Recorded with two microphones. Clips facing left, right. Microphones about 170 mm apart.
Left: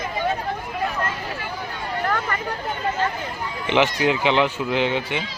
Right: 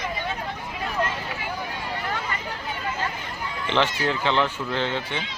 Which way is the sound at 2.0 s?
50° left (ahead or behind).